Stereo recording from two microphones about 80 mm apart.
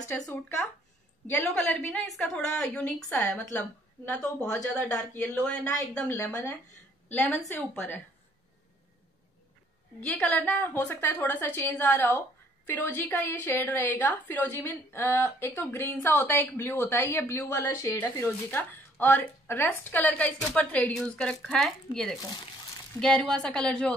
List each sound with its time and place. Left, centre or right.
0.1 s a woman's voice: left
2.0 s speech: centre
4.7 s a woman's voice: left
9.9 s a woman's voice: centre
22.2 s a sound: left
22.9 s speech: centre